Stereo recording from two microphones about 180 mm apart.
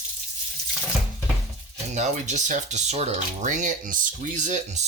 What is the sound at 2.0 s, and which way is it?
Speech, 40° right (ahead or behind).